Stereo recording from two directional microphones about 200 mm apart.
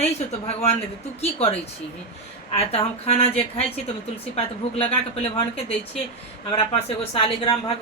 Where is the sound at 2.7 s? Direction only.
30° left (ahead or behind).